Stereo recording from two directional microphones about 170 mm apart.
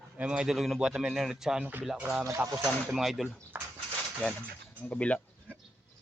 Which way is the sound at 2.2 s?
15° right (ahead or behind).